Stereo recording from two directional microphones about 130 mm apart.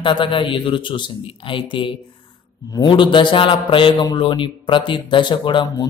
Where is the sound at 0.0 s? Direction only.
40° left (ahead or behind).